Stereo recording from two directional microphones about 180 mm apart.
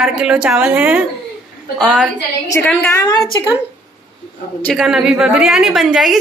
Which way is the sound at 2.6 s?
15° left (ahead or behind).